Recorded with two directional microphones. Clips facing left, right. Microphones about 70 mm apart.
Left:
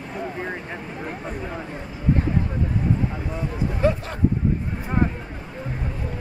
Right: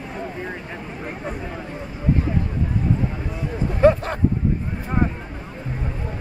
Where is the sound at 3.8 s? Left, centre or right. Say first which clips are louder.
Right 8 dB; right.